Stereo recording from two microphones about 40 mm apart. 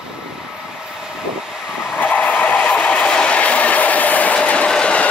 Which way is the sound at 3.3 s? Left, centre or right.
Left.